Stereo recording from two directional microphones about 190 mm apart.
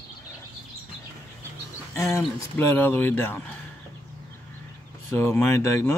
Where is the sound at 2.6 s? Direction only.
10° left (ahead or behind).